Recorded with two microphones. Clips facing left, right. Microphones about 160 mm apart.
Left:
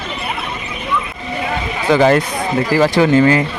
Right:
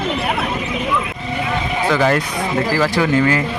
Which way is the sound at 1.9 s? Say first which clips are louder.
Left 6 dB; 25° left (ahead or behind).